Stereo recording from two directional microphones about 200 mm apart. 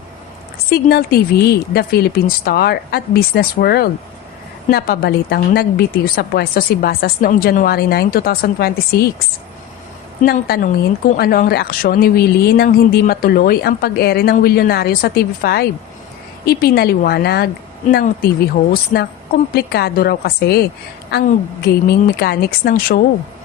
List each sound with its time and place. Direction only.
0.7 s a woman's voice: 50° left (ahead or behind)
10.2 s a woman's voice: 50° left (ahead or behind)